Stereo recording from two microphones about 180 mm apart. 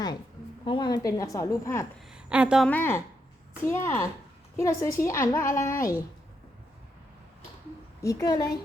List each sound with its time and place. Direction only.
0.6 s a woman's voice: 25° left (ahead or behind)
2.0 s a sound: 5° right (ahead or behind)
2.6 s a child's voice: 10° left (ahead or behind)
8.0 s a woman's voice: 20° left (ahead or behind)